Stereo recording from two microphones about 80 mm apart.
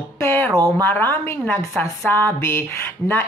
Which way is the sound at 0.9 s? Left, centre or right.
Left.